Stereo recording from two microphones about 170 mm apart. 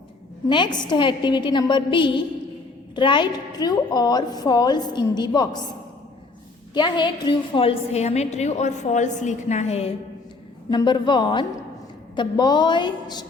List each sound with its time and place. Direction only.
0.4 s a woman's voice: 25° left (ahead or behind)
6.7 s a woman's voice: 25° left (ahead or behind)
10.7 s a woman's voice: 25° left (ahead or behind)